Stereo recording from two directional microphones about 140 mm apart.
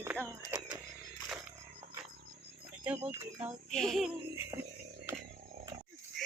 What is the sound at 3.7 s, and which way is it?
Music, centre (ahead or behind).